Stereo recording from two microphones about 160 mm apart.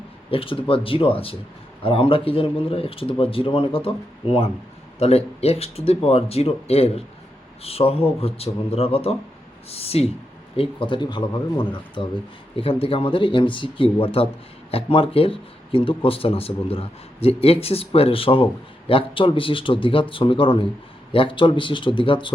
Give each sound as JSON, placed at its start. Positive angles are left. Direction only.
{"t": 0.3, "sound": "speech", "side_deg": 35}